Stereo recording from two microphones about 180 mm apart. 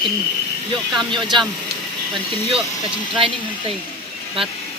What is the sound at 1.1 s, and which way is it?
Speech, 25° right (ahead or behind).